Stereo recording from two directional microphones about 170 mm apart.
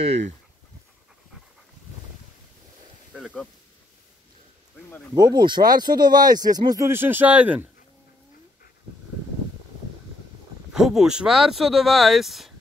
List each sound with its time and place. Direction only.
3.1 s snake: 5° right (ahead or behind)
5.1 s speech: 25° right (ahead or behind); by 7.6 s 10° right (ahead or behind)
10.7 s speech: centre (ahead or behind)